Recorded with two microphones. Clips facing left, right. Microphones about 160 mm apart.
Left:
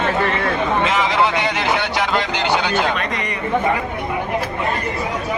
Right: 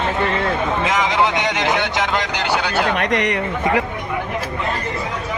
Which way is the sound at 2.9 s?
70° right (ahead or behind).